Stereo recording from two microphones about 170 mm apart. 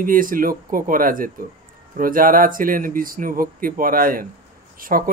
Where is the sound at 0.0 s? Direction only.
55° right (ahead or behind).